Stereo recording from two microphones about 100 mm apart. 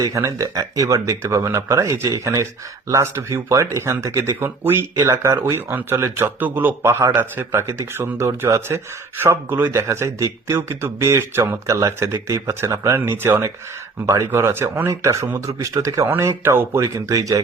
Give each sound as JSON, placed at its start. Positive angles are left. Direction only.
{"t": 0.0, "sound": "speech", "side_deg": -35}